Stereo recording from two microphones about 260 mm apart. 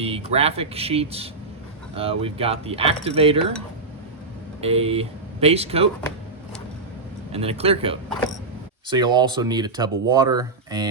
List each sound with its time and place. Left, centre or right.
0.0 s speech: right
4.6 s speech: right
7.3 s speech: right